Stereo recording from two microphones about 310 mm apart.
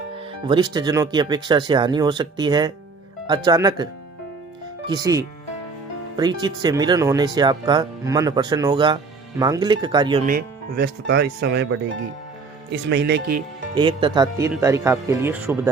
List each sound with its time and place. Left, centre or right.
0.4 s speech: centre
4.9 s speech: centre
10.2 s speech: right
13.7 s speech: centre